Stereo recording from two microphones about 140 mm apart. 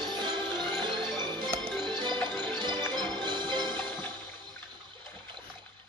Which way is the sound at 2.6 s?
35° right (ahead or behind).